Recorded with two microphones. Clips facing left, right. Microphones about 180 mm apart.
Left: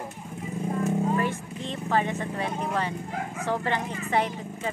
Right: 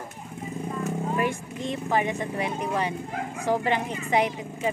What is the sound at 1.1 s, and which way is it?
Speech, 15° right (ahead or behind).